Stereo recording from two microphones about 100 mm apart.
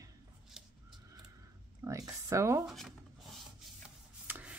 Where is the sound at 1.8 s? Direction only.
35° right (ahead or behind).